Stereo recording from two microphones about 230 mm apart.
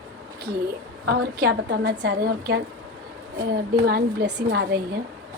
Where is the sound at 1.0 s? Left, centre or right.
Right.